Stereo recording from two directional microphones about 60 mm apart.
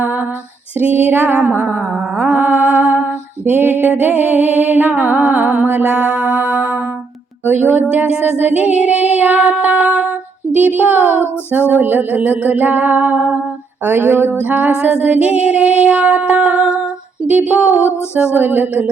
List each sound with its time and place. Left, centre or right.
0.0 s female singing: right
0.8 s music: right
7.9 s music: right
13.8 s music: right
14.3 s music: right